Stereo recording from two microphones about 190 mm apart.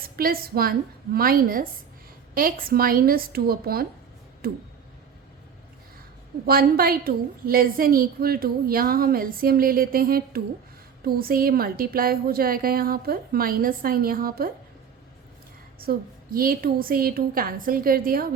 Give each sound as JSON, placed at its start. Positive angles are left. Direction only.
{"t": 0.0, "sound": "a woman's voice", "side_deg": -50}
{"t": 6.4, "sound": "a woman's voice", "side_deg": -50}
{"t": 15.9, "sound": "a woman's voice", "side_deg": -50}